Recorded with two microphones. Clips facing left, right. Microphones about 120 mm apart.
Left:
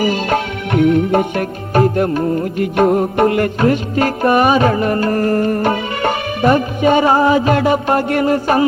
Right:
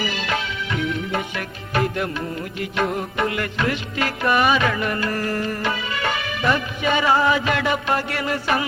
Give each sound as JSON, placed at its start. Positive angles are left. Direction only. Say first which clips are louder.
{"t": 0.0, "sound": "music", "louder": "left 9 dB", "side_deg": 50}